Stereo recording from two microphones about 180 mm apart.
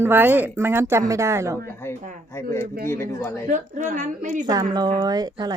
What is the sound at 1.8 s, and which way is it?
Speech, 10° left (ahead or behind).